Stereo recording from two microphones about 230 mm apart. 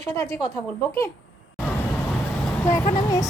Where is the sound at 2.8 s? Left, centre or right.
Centre.